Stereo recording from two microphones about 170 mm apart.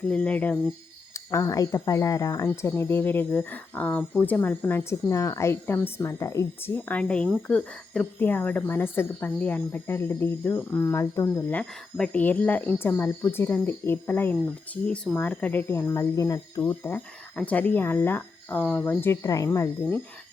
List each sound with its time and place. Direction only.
0.1 s speech: 10° left (ahead or behind)